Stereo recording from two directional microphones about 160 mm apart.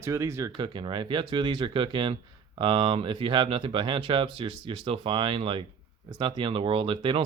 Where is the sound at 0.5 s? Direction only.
30° right (ahead or behind).